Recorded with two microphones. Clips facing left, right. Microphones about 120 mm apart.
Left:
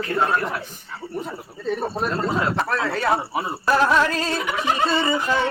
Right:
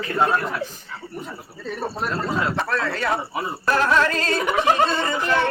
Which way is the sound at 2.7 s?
5° left (ahead or behind).